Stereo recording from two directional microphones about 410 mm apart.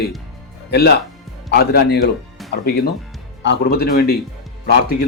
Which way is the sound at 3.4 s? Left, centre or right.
Left.